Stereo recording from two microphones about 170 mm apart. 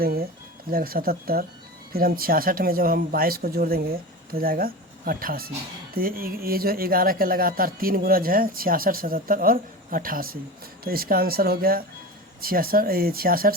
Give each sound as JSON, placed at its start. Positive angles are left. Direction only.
{"t": 0.0, "sound": "speech", "side_deg": -60}